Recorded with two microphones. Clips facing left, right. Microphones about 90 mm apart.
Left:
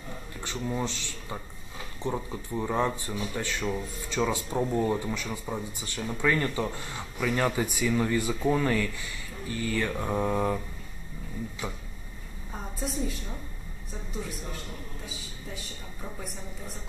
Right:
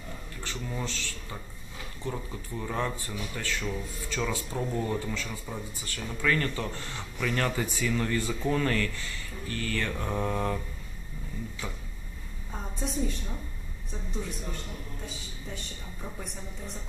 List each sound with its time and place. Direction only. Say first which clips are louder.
0.4 s speech: left 5 dB; 20° left (ahead or behind)
11.6 s speech: left 3 dB; 15° left (ahead or behind)
12.5 s a sound: even; centre (ahead or behind)
15.0 s a woman's voice: even; 5° left (ahead or behind)